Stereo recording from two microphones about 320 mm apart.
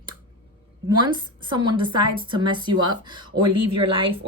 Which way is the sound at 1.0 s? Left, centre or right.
Centre.